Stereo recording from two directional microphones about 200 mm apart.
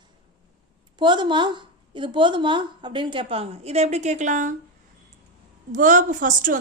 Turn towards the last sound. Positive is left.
turn(degrees=-40)  # may be behind; listen again after turning